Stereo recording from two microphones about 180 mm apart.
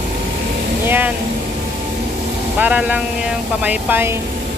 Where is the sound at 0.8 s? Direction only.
10° right (ahead or behind).